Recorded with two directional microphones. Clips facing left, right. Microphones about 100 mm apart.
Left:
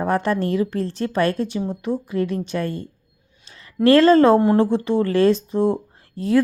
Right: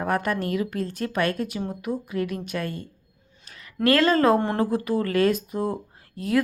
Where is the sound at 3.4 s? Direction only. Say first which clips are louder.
Even; 30° left (ahead or behind).